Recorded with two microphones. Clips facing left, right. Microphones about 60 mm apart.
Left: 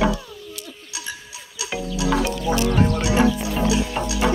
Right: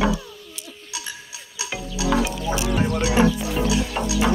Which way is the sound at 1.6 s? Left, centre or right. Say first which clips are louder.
Left 1 dB; centre.